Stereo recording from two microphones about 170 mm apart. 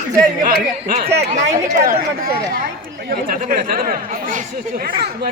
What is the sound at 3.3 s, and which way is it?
Speech, 55° right (ahead or behind).